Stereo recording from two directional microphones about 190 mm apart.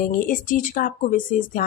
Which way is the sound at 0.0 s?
45° left (ahead or behind).